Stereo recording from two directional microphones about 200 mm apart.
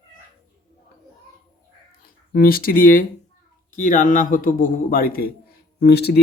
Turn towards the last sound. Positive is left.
turn(degrees=55)  # may be behind; listen again after turning